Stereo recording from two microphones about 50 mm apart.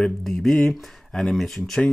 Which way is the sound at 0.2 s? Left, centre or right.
Centre.